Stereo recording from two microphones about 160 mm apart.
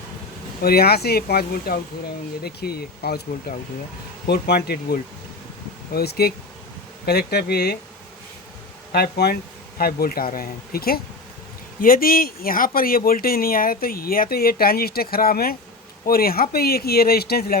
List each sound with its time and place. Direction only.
0.6 s speech: 75° left (ahead or behind)
4.3 s speech: 90° left
8.9 s speech: 80° left